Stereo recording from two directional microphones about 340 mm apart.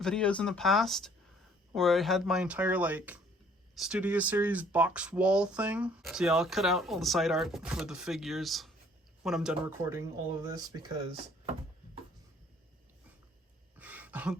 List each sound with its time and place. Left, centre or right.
0.0 s speech: centre
13.7 s throat clearing: centre